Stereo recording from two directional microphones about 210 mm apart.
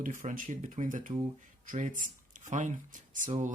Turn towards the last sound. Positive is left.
turn(degrees=-35)  # may be behind; listen again after turning